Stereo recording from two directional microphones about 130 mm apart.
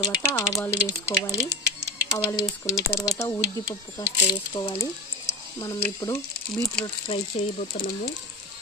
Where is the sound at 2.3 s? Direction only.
25° left (ahead or behind).